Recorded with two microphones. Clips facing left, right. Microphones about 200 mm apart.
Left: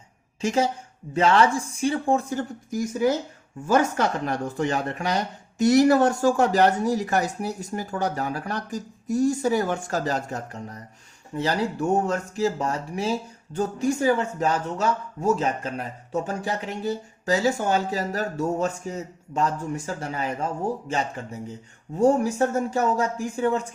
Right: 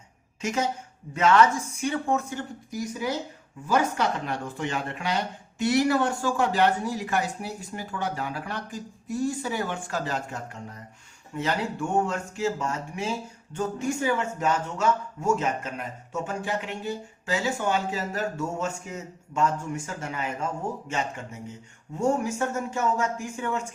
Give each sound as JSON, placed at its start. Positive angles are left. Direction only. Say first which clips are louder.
{"t": 0.4, "sound": "speech", "louder": "left 4 dB", "side_deg": 30}
{"t": 2.6, "sound": "speech", "louder": "left 8 dB", "side_deg": 45}